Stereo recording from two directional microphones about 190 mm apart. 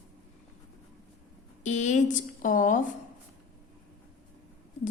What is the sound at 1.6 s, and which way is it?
A woman's voice, 40° left (ahead or behind).